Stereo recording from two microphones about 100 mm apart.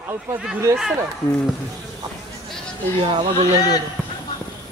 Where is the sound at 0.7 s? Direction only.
30° right (ahead or behind).